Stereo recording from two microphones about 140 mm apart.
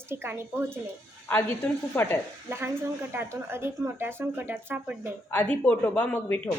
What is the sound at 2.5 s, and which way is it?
Speech, 15° right (ahead or behind).